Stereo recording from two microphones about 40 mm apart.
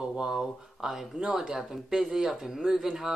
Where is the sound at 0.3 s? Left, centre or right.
Centre.